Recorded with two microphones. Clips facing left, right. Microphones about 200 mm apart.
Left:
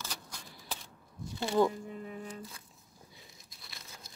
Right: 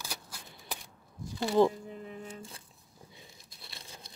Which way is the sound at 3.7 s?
30° right (ahead or behind).